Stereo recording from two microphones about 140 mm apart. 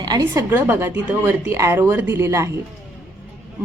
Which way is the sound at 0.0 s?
30° right (ahead or behind).